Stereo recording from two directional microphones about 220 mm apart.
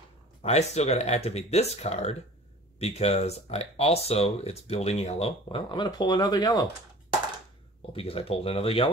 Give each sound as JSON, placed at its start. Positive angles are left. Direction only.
{"t": 0.4, "sound": "speech", "side_deg": 30}
{"t": 7.9, "sound": "speech", "side_deg": 25}